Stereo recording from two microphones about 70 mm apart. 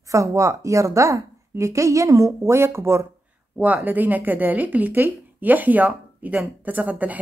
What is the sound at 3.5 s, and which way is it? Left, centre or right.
Speech, right.